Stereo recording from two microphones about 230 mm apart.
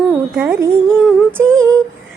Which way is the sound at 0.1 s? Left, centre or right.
Centre.